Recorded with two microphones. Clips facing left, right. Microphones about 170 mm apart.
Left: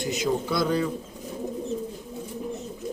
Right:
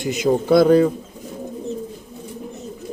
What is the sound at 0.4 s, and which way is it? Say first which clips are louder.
Speech: right 12 dB; 55° right (ahead or behind).